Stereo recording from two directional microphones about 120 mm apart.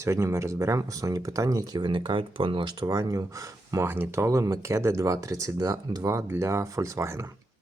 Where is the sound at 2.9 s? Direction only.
25° right (ahead or behind).